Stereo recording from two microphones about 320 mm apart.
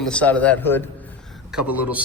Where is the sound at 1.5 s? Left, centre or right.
Centre.